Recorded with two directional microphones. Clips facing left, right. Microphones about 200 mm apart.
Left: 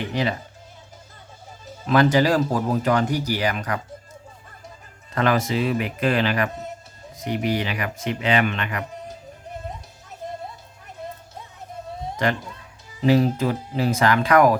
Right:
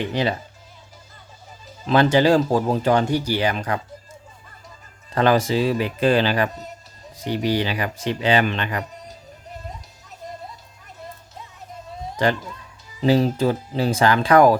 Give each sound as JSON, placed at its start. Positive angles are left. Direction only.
{"t": 0.1, "sound": "speech", "side_deg": -30}
{"t": 1.9, "sound": "speech", "side_deg": -25}
{"t": 5.1, "sound": "speech", "side_deg": -30}
{"t": 13.1, "sound": "speech", "side_deg": -30}